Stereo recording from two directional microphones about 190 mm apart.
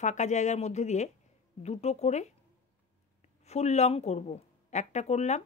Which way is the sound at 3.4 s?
35° left (ahead or behind).